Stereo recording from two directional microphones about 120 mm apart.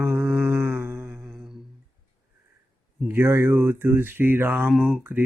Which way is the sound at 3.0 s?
20° right (ahead or behind).